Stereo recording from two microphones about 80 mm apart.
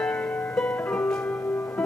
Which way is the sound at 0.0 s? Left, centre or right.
Centre.